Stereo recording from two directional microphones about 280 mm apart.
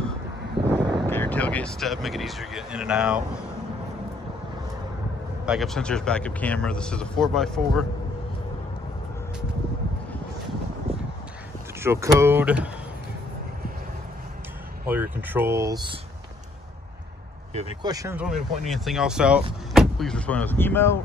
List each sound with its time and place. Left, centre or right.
0.7 s vehicle: centre
0.9 s speech: centre
5.4 s speech: centre
10.9 s a sound: centre
11.8 s speech: centre
14.9 s speech: centre
17.6 s speech: centre